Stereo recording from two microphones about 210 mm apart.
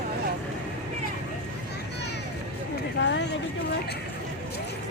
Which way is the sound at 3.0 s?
60° left (ahead or behind).